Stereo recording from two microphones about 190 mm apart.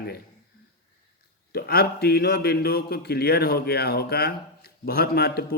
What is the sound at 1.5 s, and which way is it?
A man's voice, 55° left (ahead or behind).